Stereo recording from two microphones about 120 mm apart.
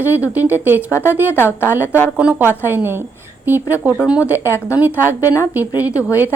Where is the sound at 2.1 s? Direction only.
15° right (ahead or behind).